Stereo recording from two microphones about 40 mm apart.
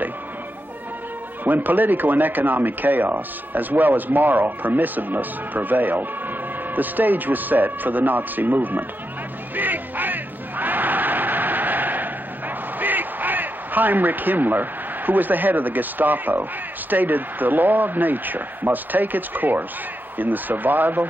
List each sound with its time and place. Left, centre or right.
1.4 s speech: right
9.6 s a sound: right
12.7 s a man's voice: right